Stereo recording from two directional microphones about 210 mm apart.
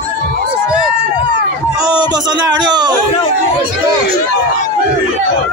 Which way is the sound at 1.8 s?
20° right (ahead or behind).